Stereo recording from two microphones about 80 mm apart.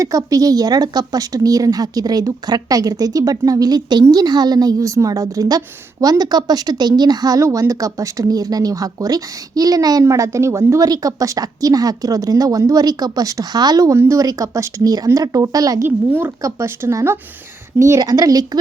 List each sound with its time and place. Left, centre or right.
0.0 s a woman's voice: right
10.0 s a woman's voice: right
15.8 s a woman's voice: right
18.0 s a woman's voice: right